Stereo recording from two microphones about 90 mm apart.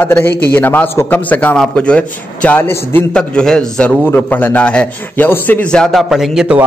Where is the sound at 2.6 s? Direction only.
25° left (ahead or behind).